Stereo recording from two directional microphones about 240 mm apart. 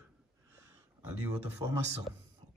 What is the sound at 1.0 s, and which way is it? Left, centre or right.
Speech, centre.